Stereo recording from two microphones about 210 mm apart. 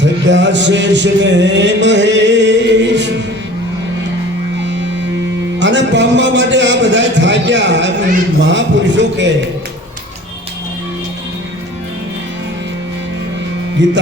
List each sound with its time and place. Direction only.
0.0 s a man's voice: 60° right (ahead or behind)
4.5 s music: 60° right (ahead or behind)
5.5 s a man's voice: 60° right (ahead or behind)
13.8 s a man's voice: 60° right (ahead or behind)